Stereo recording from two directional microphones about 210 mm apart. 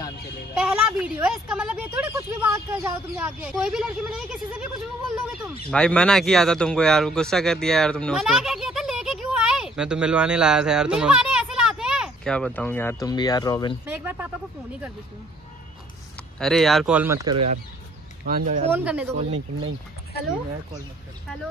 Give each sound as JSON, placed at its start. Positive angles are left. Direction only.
{"t": 0.6, "sound": "speech", "side_deg": -5}
{"t": 5.7, "sound": "a man's voice", "side_deg": 5}
{"t": 13.8, "sound": "a sound", "side_deg": -10}
{"t": 16.3, "sound": "speech", "side_deg": 0}
{"t": 18.2, "sound": "speech", "side_deg": -40}
{"t": 18.7, "sound": "speech", "side_deg": -5}